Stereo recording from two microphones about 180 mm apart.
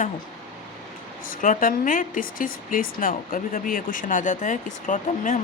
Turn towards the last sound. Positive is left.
turn(degrees=45)  # may be behind; listen again after turning